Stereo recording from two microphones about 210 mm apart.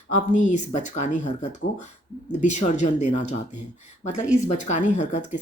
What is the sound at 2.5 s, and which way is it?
Speech, 35° left (ahead or behind).